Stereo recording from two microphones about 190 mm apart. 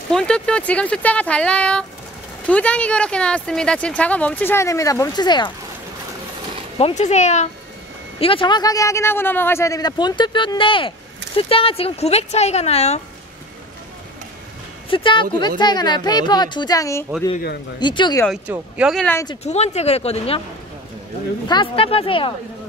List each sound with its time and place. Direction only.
0.1 s speech: 5° left (ahead or behind); by 5.5 s 20° left (ahead or behind)
7.0 s a man's voice: 35° left (ahead or behind)
14.9 s a man's voice: 25° left (ahead or behind)
18.5 s speech: 5° right (ahead or behind)
19.0 s speech: 15° left (ahead or behind)
19.4 s speech: 35° left (ahead or behind)
21.5 s a man's voice: 25° left (ahead or behind)